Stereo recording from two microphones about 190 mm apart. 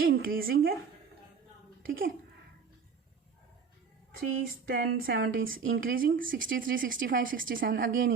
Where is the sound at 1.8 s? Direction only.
50° right (ahead or behind).